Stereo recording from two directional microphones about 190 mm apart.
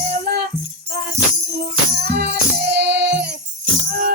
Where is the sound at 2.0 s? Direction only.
60° right (ahead or behind).